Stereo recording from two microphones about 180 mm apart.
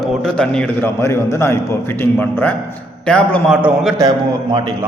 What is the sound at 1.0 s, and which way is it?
A man's voice, 15° left (ahead or behind).